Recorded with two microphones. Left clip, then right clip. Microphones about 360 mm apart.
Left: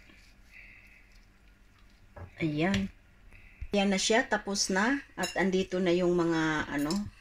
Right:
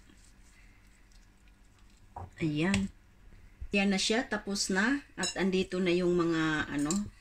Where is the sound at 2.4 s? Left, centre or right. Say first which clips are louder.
Left 2 dB; centre.